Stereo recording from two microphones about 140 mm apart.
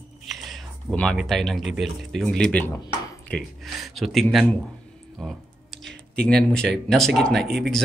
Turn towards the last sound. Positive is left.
turn(degrees=0)  # may be behind; listen again after turning